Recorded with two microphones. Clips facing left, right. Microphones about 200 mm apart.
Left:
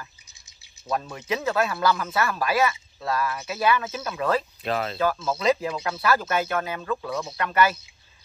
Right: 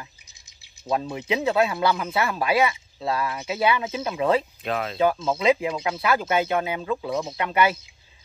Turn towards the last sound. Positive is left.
turn(degrees=-20)  # may be behind; listen again after turning